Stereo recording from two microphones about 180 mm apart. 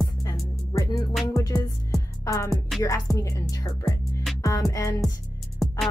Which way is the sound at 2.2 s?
15° left (ahead or behind).